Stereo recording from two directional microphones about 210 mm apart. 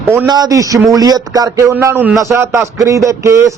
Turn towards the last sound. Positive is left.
turn(degrees=-15)  # may be behind; listen again after turning